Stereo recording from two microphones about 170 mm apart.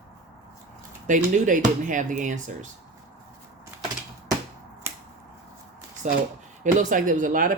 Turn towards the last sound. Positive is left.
turn(degrees=-50)  # may be behind; listen again after turning